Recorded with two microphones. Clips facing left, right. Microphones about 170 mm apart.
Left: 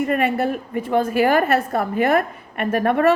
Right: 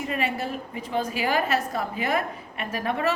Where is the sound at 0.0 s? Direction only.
55° left (ahead or behind).